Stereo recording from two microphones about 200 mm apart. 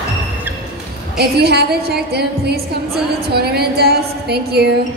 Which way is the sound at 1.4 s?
55° right (ahead or behind).